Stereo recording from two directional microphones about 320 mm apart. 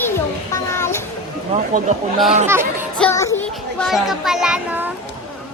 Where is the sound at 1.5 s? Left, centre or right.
Right.